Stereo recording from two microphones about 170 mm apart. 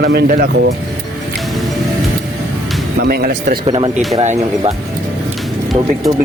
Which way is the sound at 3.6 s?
30° right (ahead or behind).